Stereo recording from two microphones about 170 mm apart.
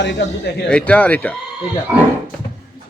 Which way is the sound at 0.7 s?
5° left (ahead or behind).